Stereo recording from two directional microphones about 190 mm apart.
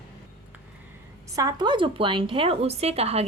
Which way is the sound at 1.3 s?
20° right (ahead or behind).